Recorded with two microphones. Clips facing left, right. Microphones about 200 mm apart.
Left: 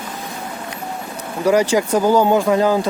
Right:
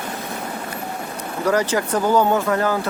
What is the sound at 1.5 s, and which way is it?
Speech, 10° left (ahead or behind).